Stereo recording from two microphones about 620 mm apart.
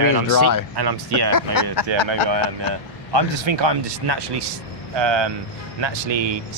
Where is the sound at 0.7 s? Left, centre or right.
Right.